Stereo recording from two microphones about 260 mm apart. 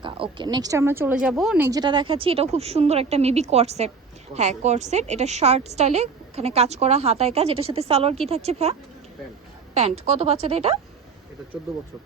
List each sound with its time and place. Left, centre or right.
0.0 s speech: centre
9.7 s speech: right